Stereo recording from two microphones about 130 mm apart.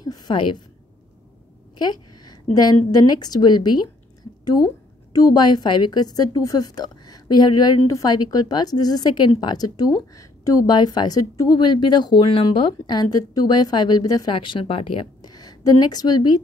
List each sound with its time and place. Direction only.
0.0 s a sound: 30° left (ahead or behind)
1.8 s a woman's voice: 30° left (ahead or behind)
5.1 s a woman's voice: 30° left (ahead or behind)